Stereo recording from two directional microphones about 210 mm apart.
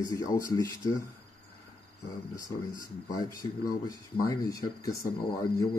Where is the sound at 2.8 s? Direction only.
15° left (ahead or behind).